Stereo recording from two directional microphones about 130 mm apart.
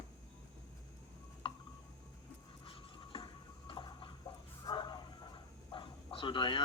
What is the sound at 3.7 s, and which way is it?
Chicken, 35° left (ahead or behind).